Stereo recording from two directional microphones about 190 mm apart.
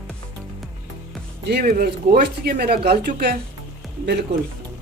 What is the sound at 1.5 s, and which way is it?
Speech, 55° right (ahead or behind).